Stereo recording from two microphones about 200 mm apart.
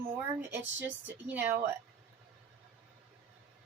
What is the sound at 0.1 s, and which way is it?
Speech, 10° right (ahead or behind).